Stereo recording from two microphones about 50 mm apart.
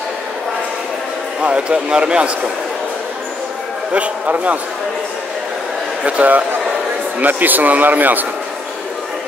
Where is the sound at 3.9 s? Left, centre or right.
Right.